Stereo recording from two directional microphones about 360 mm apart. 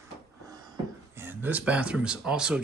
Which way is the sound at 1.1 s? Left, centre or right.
Centre.